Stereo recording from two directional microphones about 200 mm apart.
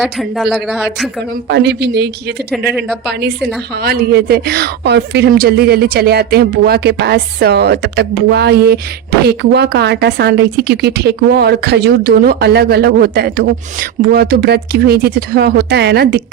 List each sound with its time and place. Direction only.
0.0 s speech: centre (ahead or behind)
1.5 s speech: 60° right (ahead or behind)
2.5 s speech: 5° right (ahead or behind)
3.1 s speech: 55° right (ahead or behind)